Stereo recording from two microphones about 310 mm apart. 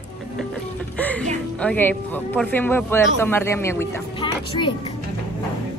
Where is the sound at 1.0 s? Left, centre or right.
Centre.